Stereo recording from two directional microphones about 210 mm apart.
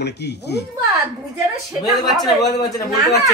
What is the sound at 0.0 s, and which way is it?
Speech, 55° left (ahead or behind).